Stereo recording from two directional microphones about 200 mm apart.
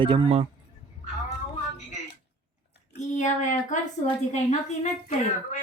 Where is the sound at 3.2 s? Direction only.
35° left (ahead or behind).